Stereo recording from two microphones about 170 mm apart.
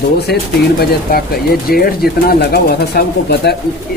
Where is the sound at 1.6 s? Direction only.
60° left (ahead or behind).